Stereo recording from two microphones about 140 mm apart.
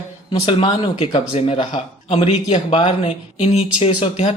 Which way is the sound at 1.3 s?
45° left (ahead or behind).